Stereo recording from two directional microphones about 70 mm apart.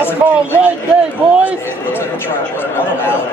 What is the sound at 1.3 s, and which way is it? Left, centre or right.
Speech, centre.